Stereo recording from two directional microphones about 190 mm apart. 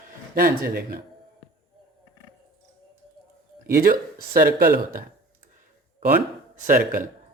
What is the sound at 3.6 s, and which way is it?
Speech, 50° right (ahead or behind).